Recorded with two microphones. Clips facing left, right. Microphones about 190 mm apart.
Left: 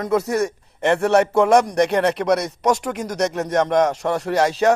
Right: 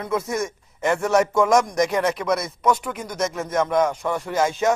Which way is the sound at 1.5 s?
35° left (ahead or behind).